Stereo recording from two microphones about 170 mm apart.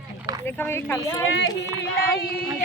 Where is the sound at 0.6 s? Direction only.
15° left (ahead or behind).